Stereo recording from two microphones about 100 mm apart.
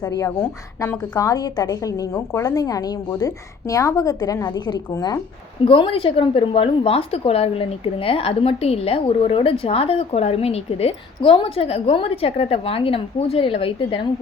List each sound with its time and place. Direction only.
0.3 s a woman's voice: 25° left (ahead or behind)
1.1 s a woman's voice: 40° left (ahead or behind)
5.6 s a woman's voice: 65° left (ahead or behind)